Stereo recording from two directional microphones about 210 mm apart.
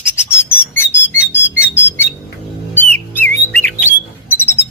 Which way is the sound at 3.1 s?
10° left (ahead or behind).